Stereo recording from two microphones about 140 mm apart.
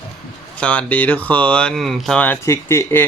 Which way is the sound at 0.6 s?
10° left (ahead or behind).